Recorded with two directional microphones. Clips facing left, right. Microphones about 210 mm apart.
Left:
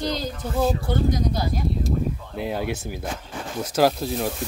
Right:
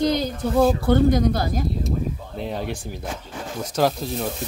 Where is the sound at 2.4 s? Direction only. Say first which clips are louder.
Left 2 dB; 5° left (ahead or behind).